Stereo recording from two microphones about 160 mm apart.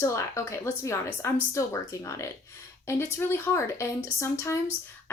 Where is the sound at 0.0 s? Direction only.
20° left (ahead or behind).